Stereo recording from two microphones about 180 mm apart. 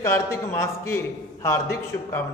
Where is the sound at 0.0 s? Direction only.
15° left (ahead or behind).